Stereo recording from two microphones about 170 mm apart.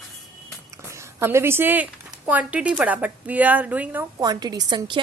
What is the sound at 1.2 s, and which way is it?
Speech, 15° right (ahead or behind).